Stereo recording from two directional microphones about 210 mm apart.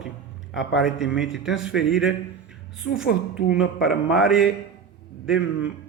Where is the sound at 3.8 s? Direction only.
5° right (ahead or behind).